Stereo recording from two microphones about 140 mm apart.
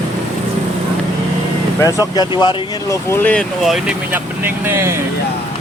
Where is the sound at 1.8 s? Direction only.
25° left (ahead or behind).